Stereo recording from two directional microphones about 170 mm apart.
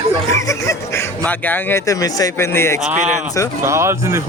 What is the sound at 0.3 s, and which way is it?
Speech, 15° left (ahead or behind).